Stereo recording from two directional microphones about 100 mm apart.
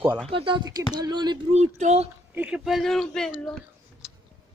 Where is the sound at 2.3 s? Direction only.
10° right (ahead or behind); by 3.3 s 5° left (ahead or behind).